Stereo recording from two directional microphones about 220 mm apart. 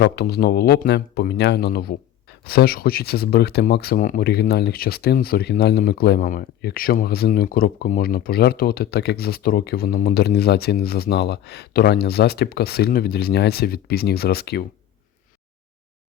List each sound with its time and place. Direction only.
0.0 s speech: 45° left (ahead or behind)